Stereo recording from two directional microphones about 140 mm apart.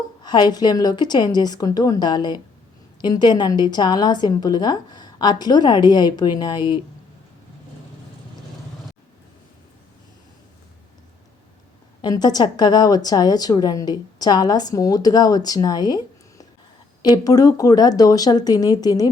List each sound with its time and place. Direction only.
0.2 s a woman's voice: 30° left (ahead or behind)
12.0 s a woman's voice: 30° left (ahead or behind)